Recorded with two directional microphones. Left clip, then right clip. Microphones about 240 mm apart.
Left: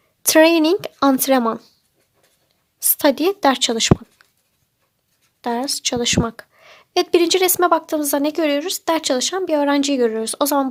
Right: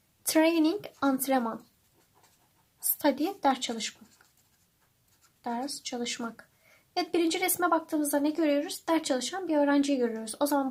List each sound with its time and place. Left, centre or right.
0.2 s speech: left
3.0 s speech: left
5.4 s speech: left